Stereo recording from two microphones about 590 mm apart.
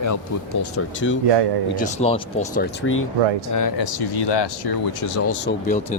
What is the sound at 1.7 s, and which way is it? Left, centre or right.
Speech, centre.